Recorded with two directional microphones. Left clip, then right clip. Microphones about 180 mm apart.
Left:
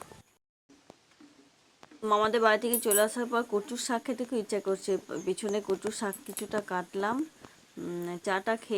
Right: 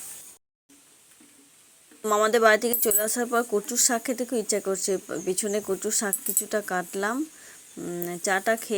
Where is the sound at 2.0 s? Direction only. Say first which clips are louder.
Right 5 dB; 20° right (ahead or behind).